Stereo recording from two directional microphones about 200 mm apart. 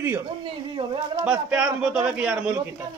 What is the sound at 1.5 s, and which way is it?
Speech, 5° right (ahead or behind).